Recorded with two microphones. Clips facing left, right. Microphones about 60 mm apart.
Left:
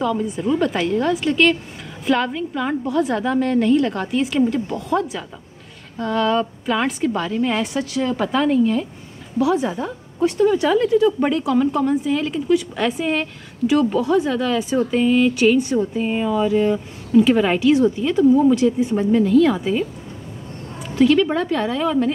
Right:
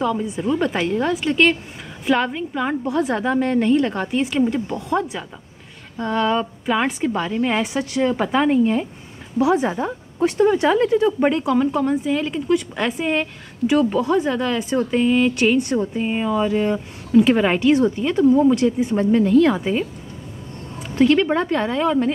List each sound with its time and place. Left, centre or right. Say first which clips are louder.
0.0 s a woman's voice: left 1 dB; centre
11.5 s a woman's voice: left 1 dB; centre
14.3 s a woman's voice: left 1 dB; centre
14.6 s speech: left 1 dB; centre
14.9 s a woman's voice: even; centre
18.1 s speech: even; centre
19.1 s a woman's voice: even; centre
21.0 s a woman's voice: even; centre